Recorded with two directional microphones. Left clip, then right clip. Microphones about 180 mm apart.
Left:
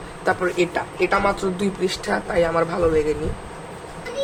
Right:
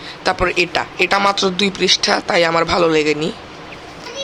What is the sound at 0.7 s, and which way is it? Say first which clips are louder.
Speech: right 5 dB; 20° right (ahead or behind).